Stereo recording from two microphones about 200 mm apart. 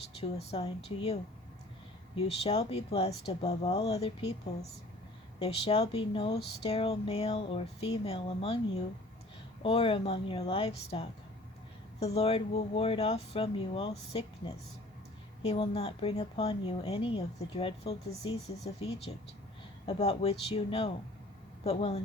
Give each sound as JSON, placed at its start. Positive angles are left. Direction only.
{"t": 0.2, "sound": "speech", "side_deg": 30}
{"t": 9.6, "sound": "speech", "side_deg": 25}
{"t": 15.4, "sound": "speech", "side_deg": 30}